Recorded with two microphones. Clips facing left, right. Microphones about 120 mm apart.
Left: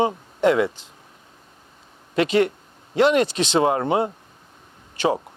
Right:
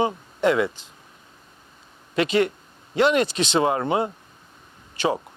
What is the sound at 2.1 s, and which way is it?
A man's voice, 55° left (ahead or behind).